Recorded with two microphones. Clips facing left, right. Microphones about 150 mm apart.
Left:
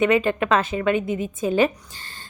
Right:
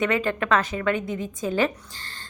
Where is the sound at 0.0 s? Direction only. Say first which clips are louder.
Left 5 dB; 20° left (ahead or behind).